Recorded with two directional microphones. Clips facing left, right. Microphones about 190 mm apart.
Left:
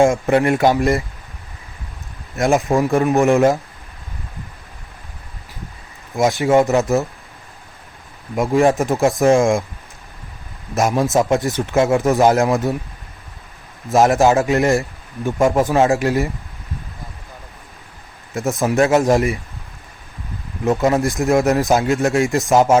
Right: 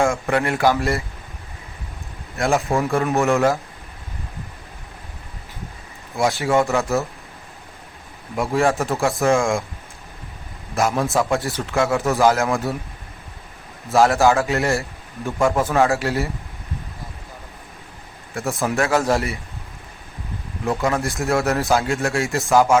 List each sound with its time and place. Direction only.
0.0 s a man's voice: 20° left (ahead or behind)
2.4 s a man's voice: 15° left (ahead or behind)
6.1 s a man's voice: 20° left (ahead or behind)
8.4 s a man's voice: 15° left (ahead or behind)
10.8 s a man's voice: 20° left (ahead or behind)
13.9 s a man's voice: 20° left (ahead or behind)
18.3 s a man's voice: 20° left (ahead or behind)
20.7 s a man's voice: 20° left (ahead or behind)